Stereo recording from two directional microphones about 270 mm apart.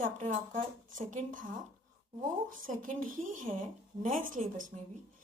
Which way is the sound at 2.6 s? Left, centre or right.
Right.